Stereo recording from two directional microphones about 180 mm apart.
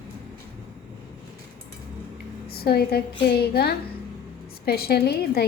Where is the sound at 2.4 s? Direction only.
60° left (ahead or behind).